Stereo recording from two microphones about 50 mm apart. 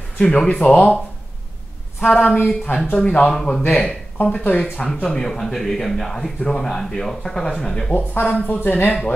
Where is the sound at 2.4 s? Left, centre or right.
Left.